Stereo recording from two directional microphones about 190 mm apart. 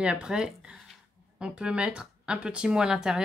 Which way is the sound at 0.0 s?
5° right (ahead or behind).